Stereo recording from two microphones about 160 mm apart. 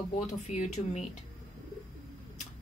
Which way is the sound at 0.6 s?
45° left (ahead or behind).